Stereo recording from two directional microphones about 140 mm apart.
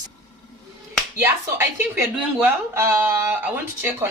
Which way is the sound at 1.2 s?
15° right (ahead or behind).